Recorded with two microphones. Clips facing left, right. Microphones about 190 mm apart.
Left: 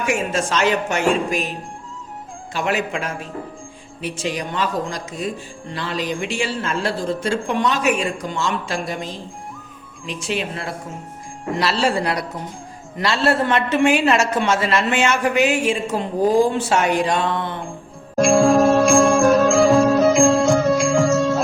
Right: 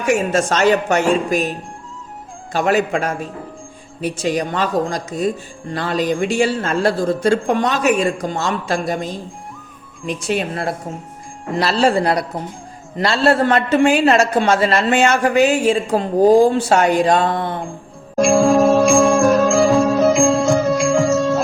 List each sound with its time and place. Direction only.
0.1 s a woman's voice: 40° right (ahead or behind)
10.1 s a woman's voice: 45° right (ahead or behind)
18.2 s music: centre (ahead or behind)